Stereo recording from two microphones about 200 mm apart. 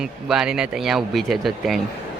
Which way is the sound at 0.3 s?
5° right (ahead or behind).